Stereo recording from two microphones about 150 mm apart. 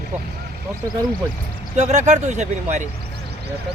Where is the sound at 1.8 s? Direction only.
50° right (ahead or behind).